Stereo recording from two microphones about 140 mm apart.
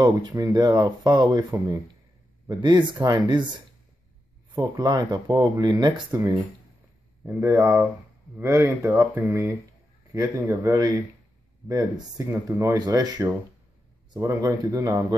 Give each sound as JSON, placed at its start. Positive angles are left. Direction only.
{"t": 0.0, "sound": "speech", "side_deg": -30}
{"t": 4.6, "sound": "speech", "side_deg": -30}
{"t": 12.3, "sound": "speech", "side_deg": -25}